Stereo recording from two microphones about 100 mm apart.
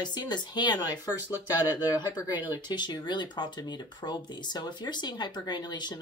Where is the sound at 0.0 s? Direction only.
45° left (ahead or behind).